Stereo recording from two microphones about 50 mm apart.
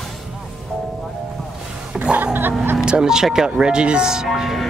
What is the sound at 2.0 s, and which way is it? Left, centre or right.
Music, right.